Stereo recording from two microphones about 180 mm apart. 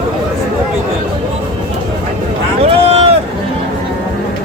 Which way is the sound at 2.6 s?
35° right (ahead or behind).